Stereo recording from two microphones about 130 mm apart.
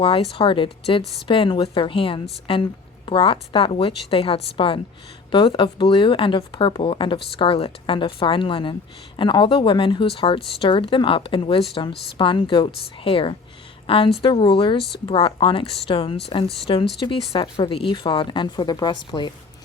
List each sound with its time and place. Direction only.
0.0 s a woman's voice: 45° left (ahead or behind)